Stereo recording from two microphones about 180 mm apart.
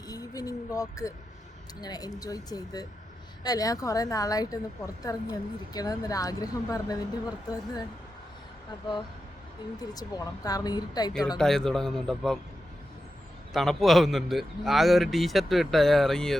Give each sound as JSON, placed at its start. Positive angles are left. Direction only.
{"t": 0.1, "sound": "a woman's voice", "side_deg": 20}
{"t": 9.9, "sound": "a woman's voice", "side_deg": 20}
{"t": 11.3, "sound": "a man's voice", "side_deg": 5}
{"t": 13.5, "sound": "a man's voice", "side_deg": 0}